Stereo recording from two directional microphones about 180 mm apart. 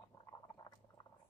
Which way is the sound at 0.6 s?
20° left (ahead or behind).